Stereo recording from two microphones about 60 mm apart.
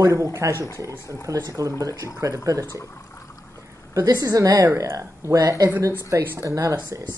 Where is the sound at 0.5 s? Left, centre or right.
Left.